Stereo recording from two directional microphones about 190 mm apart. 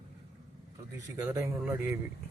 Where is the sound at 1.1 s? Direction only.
15° right (ahead or behind).